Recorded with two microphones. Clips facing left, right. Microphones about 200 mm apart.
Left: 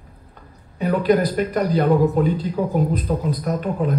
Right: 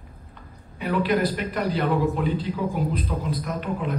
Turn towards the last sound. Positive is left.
turn(degrees=40)  # may be behind; listen again after turning